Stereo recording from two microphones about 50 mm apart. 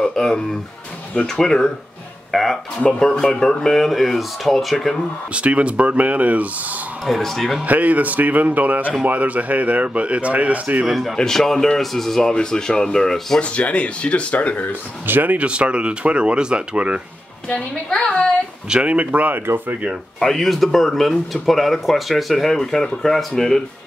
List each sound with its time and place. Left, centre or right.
0.0 s a sound: centre
1.2 s speech: centre
5.3 s speech: right
7.1 s speech: centre
7.6 s speech: right
11.1 s speech: centre
13.4 s speech: left
15.0 s speech: right
15.3 s speech: right
17.8 s speech: centre
18.7 s speech: right
20.2 s speech: centre